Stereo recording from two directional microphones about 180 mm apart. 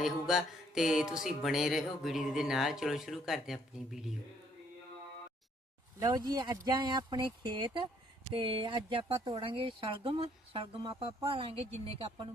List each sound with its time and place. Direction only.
0.0 s mantra: 5° right (ahead or behind)
6.0 s speech: 20° right (ahead or behind)